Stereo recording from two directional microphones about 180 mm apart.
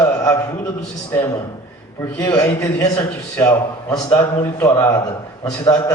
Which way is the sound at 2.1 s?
15° left (ahead or behind).